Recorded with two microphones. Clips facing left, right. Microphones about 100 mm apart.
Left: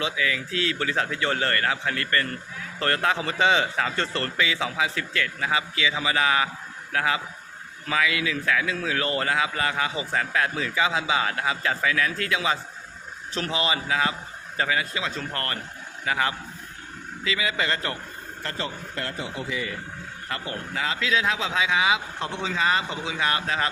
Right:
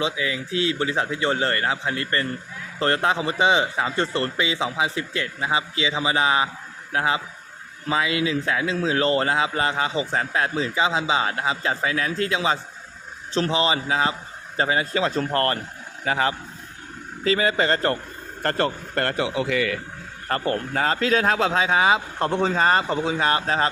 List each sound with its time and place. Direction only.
0.0 s a man's voice: 25° right (ahead or behind)
17.2 s speech: 40° right (ahead or behind)
18.4 s speech: 55° right (ahead or behind); by 19.8 s 75° right (ahead or behind)
20.2 s speech: 45° right (ahead or behind)